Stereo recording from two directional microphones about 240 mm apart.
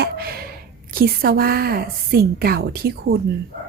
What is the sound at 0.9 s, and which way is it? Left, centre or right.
Speech, right.